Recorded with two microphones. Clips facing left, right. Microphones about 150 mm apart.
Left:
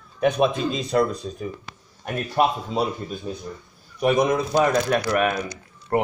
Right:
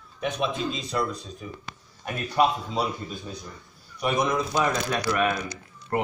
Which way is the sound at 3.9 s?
50° left (ahead or behind).